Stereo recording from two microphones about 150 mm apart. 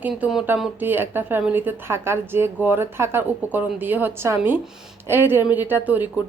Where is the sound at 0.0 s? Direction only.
5° right (ahead or behind).